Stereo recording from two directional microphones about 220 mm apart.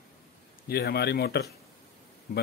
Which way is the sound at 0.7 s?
45° left (ahead or behind).